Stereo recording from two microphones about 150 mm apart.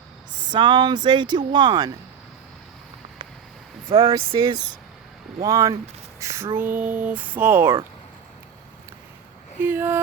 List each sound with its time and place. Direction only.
0.5 s speech: 30° right (ahead or behind)
3.9 s speech: 25° right (ahead or behind)
6.1 s a sound: 20° right (ahead or behind)
6.6 s music: 10° right (ahead or behind)
9.6 s music: 15° right (ahead or behind)